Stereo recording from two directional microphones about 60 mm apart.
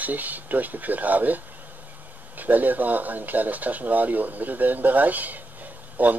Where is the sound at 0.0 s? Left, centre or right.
Right.